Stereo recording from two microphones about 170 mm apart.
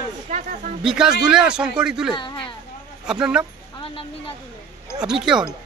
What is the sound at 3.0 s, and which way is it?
Speech, 5° right (ahead or behind).